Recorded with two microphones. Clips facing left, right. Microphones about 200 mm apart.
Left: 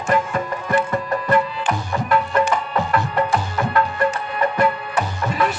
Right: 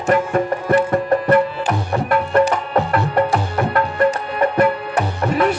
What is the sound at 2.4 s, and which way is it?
Music, 40° right (ahead or behind).